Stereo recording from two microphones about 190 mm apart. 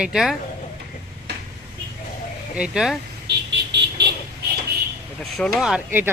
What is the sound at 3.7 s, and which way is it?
Vehicle, 65° right (ahead or behind).